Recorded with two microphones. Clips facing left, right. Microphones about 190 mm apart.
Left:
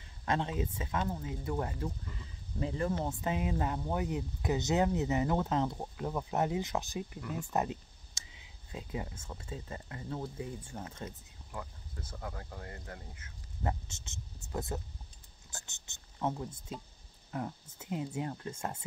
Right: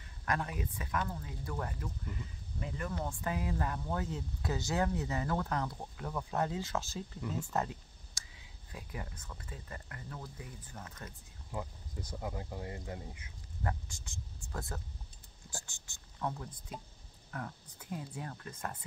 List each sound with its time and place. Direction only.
0.2 s speech: 25° left (ahead or behind)
11.5 s speech: 15° right (ahead or behind)
13.6 s a sound: 20° left (ahead or behind)
15.5 s speech: 20° left (ahead or behind)